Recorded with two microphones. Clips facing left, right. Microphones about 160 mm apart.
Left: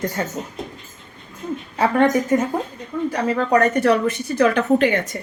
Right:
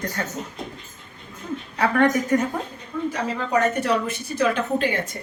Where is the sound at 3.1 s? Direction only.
65° left (ahead or behind).